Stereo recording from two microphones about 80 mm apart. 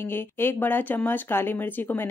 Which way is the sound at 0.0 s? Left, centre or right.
Left.